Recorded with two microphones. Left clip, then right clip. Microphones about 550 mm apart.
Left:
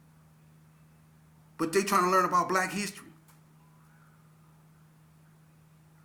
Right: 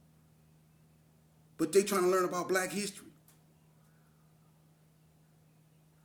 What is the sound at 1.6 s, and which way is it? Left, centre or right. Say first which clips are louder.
A man's voice: left 3 dB; right.